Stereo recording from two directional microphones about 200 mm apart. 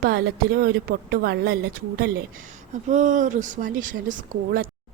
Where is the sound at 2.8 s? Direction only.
40° right (ahead or behind).